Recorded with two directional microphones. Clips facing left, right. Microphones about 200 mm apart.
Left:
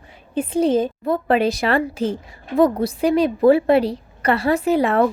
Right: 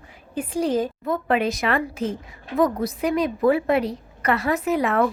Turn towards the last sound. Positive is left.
turn(degrees=30)  # may be behind; listen again after turning